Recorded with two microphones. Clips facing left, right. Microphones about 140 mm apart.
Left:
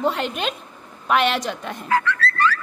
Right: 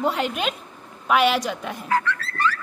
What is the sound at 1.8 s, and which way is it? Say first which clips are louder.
Dog: left 3 dB; 90° left.